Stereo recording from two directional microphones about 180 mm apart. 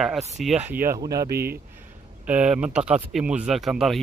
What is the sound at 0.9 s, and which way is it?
Speech, 20° right (ahead or behind).